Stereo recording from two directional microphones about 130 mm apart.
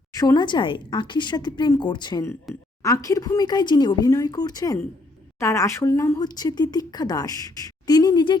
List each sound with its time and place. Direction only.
0.1 s a woman's voice: 30° left (ahead or behind)
2.5 s speech: centre (ahead or behind)
2.8 s a woman's voice: 25° left (ahead or behind)